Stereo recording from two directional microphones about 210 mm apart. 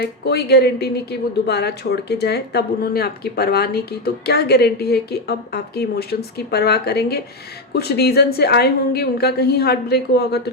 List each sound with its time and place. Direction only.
0.0 s speech: 50° left (ahead or behind)